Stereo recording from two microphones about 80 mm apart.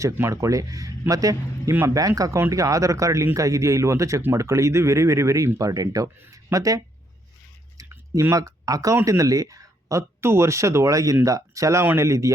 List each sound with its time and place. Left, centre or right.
0.0 s speech: right
5.5 s speech: right
7.8 s a sound: right
8.2 s speech: right